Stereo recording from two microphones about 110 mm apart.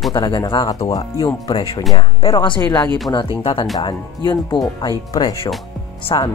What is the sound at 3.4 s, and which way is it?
Speech, 50° left (ahead or behind).